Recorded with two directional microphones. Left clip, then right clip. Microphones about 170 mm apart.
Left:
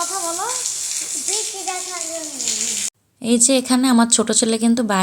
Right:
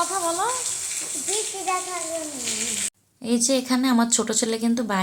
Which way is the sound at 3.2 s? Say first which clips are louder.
Left 5 dB; 40° left (ahead or behind).